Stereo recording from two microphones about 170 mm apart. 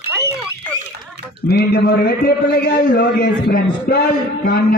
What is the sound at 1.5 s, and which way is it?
A man's voice, 70° left (ahead or behind).